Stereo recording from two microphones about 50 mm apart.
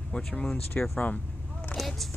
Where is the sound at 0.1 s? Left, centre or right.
Centre.